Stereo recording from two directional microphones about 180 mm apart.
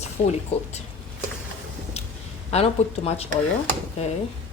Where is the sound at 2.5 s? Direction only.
35° left (ahead or behind).